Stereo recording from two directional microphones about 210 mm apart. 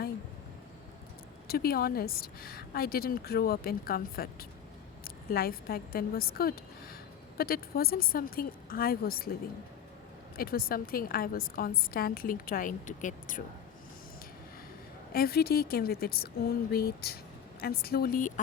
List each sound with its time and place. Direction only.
1.5 s a woman's voice: 45° left (ahead or behind)
10.3 s a woman's voice: 45° left (ahead or behind)
15.1 s a woman's voice: 45° left (ahead or behind)